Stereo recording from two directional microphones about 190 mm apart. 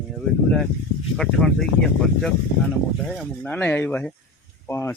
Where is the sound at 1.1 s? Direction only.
Centre (ahead or behind).